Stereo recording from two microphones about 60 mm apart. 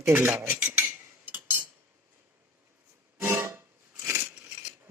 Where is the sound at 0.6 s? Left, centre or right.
Right.